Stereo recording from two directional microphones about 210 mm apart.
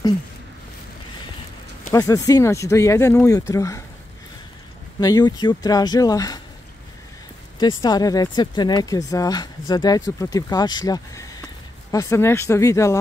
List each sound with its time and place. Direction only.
1.9 s speech: 15° left (ahead or behind)
5.0 s speech: 20° left (ahead or behind)
7.5 s speech: 20° left (ahead or behind)